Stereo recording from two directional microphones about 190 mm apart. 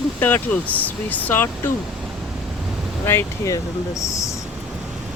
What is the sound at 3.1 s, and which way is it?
Speech, 15° left (ahead or behind).